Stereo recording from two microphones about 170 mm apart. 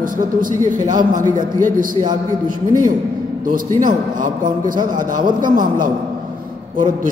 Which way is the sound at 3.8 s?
50° right (ahead or behind).